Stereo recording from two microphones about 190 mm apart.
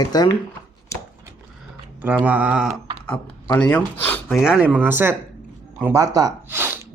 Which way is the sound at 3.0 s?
10° left (ahead or behind).